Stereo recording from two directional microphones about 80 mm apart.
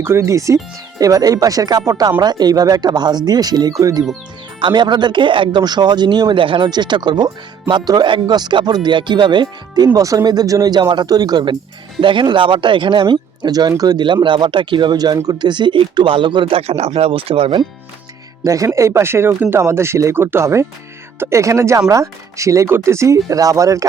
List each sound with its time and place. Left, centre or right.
0.0 s speech: right
4.6 s speech: right
11.9 s speech: right
18.4 s speech: right